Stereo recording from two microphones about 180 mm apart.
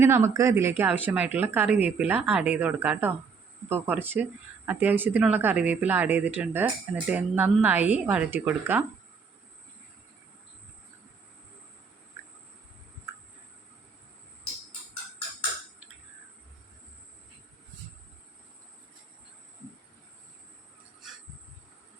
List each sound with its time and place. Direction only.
0.0 s speech: 15° right (ahead or behind)